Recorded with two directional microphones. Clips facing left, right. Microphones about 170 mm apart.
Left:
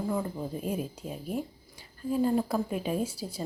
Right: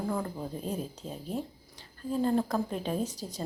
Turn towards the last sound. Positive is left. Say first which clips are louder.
# left 1 dB
turn(degrees=10)  # may be behind; listen again after turning